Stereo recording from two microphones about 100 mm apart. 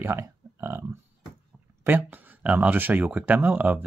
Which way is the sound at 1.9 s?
20° right (ahead or behind).